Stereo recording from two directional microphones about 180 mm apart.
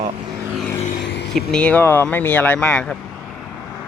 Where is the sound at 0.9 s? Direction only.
75° left (ahead or behind).